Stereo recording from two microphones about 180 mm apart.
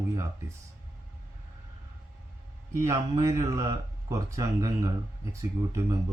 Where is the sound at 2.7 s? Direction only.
15° right (ahead or behind).